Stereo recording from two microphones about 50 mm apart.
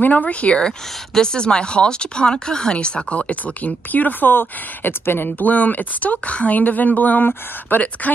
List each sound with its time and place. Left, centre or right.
0.0 s speech: left
5.5 s speech: left